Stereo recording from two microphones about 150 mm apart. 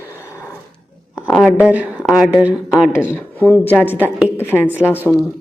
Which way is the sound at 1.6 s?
10° right (ahead or behind).